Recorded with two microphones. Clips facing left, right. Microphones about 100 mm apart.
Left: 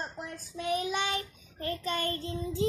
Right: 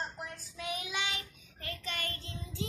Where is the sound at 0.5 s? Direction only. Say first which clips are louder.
Left 8 dB; 35° left (ahead or behind).